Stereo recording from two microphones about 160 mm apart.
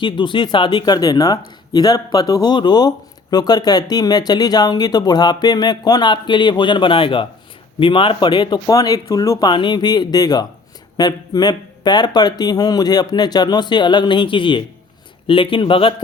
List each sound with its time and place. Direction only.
0.0 s speech: 30° left (ahead or behind)